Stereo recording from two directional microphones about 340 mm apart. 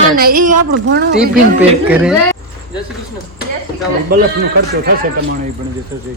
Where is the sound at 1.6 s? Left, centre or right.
Centre.